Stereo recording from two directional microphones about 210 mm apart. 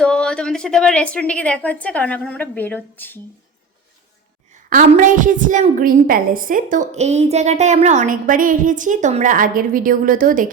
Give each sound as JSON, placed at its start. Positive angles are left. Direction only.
{"t": 0.0, "sound": "a woman's voice", "side_deg": 5}
{"t": 4.7, "sound": "a woman's voice", "side_deg": -40}